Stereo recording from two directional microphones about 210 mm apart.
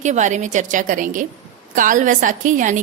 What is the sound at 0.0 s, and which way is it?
A woman's voice, 35° right (ahead or behind).